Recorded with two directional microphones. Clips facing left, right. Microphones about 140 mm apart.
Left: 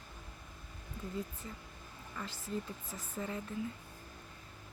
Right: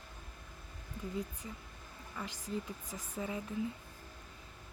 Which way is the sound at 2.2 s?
15° right (ahead or behind).